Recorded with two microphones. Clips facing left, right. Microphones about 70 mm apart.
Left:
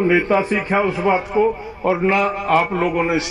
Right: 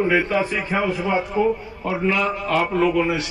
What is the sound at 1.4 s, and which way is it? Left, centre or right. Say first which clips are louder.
A man's voice: left 3 dB; left.